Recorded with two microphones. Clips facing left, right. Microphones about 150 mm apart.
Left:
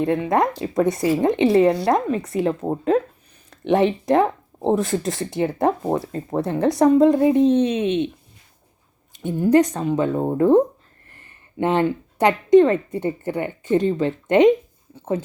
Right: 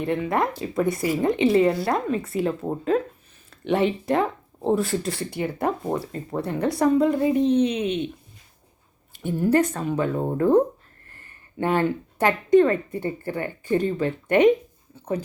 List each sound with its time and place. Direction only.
0.0 s speech: 20° left (ahead or behind)
9.2 s speech: 20° left (ahead or behind)